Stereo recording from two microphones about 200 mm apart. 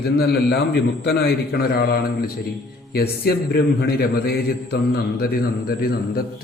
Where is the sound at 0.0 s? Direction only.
50° left (ahead or behind).